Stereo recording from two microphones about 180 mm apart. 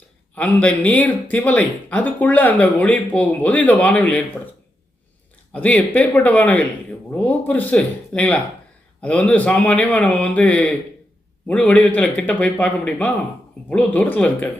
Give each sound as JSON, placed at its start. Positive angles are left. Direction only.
{"t": 0.3, "sound": "speech", "side_deg": 10}
{"t": 5.5, "sound": "speech", "side_deg": 10}